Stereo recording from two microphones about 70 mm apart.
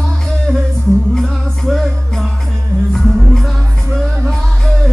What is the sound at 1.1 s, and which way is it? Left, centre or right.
Music, centre.